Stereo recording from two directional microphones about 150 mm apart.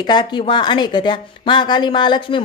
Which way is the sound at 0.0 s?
30° left (ahead or behind).